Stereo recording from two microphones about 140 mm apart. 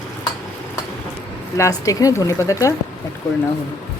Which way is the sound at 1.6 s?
25° left (ahead or behind).